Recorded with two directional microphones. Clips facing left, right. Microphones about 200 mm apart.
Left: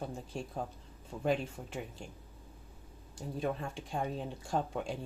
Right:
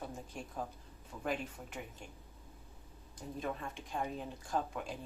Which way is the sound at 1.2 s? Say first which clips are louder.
Left 6 dB; 30° left (ahead or behind).